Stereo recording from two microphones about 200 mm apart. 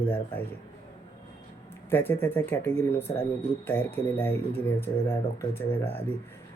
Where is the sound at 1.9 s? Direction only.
10° left (ahead or behind).